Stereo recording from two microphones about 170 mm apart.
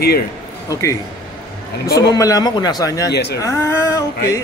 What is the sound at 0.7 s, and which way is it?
Speech, 20° left (ahead or behind).